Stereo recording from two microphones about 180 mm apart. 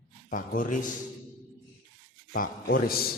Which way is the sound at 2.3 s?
55° left (ahead or behind).